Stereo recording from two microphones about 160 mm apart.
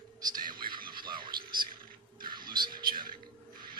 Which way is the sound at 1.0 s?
30° right (ahead or behind).